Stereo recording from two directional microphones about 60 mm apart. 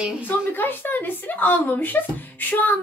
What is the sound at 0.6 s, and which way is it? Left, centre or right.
A woman's voice, left.